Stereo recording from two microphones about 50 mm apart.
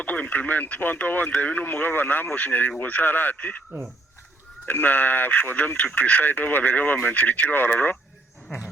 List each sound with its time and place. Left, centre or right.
0.0 s speech: left
4.6 s speech: left